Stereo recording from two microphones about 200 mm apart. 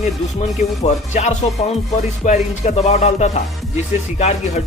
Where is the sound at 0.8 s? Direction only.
35° left (ahead or behind).